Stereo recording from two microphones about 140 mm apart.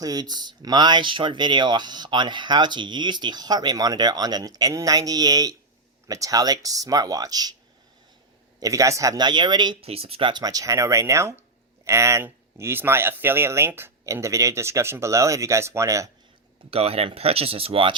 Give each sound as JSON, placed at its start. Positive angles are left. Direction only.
{"t": 0.0, "sound": "speech", "side_deg": -25}
{"t": 8.6, "sound": "speech", "side_deg": -25}
{"t": 9.8, "sound": "speech", "side_deg": -45}
{"t": 16.6, "sound": "speech", "side_deg": -45}